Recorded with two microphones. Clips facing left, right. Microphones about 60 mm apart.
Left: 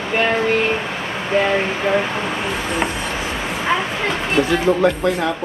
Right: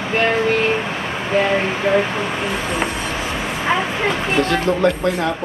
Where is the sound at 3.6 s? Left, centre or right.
Centre.